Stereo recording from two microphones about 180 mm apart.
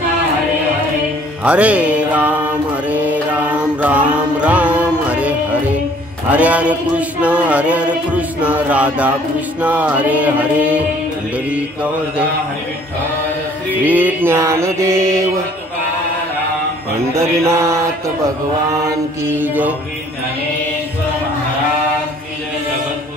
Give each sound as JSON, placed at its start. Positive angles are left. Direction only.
{"t": 1.4, "sound": "music", "side_deg": -5}
{"t": 13.8, "sound": "music", "side_deg": -10}
{"t": 17.1, "sound": "music", "side_deg": -15}
{"t": 19.2, "sound": "music", "side_deg": -10}